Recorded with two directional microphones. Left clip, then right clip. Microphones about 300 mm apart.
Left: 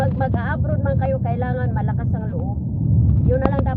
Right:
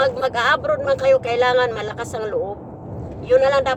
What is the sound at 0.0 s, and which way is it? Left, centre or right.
Speech, centre.